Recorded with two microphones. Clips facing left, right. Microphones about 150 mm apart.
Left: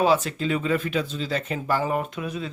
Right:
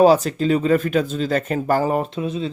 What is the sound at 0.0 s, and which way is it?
Speech, 40° right (ahead or behind).